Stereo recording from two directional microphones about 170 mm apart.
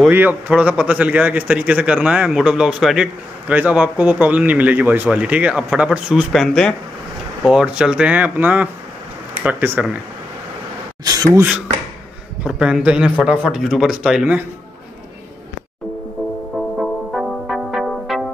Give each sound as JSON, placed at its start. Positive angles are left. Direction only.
{"t": 0.1, "sound": "a man's voice", "side_deg": -10}
{"t": 11.1, "sound": "speech", "side_deg": -20}
{"t": 12.4, "sound": "speech", "side_deg": -5}
{"t": 16.8, "sound": "music", "side_deg": 0}